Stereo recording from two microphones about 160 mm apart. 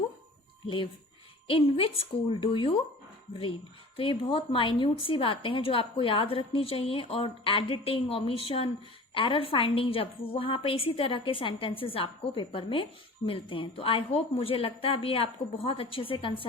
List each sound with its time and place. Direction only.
1.5 s a woman's voice: 35° left (ahead or behind)
3.9 s a woman's voice: 35° left (ahead or behind)